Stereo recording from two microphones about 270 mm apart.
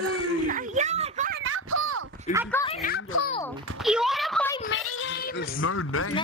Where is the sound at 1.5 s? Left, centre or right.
Right.